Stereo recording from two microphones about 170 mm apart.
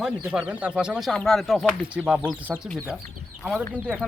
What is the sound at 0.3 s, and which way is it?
Speech, 5° right (ahead or behind).